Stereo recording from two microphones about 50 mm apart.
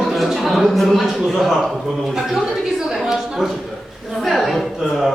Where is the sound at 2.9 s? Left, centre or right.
Centre.